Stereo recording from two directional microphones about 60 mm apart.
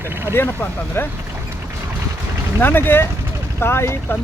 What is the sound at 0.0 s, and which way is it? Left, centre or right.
Vehicle, right.